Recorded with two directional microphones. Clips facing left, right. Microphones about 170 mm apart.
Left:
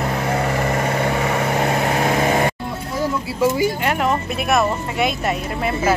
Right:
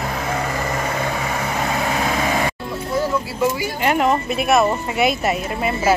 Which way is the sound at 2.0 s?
50° left (ahead or behind).